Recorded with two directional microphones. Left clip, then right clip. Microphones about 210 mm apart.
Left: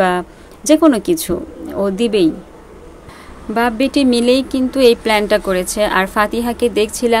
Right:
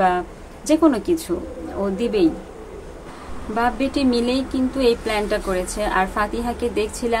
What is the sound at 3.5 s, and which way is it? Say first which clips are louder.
Speech: left 6 dB; 45° left (ahead or behind).